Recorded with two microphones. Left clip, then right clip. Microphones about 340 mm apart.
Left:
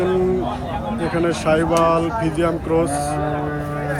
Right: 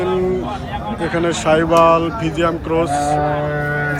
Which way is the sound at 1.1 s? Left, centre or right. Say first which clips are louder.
Right 3 dB; centre.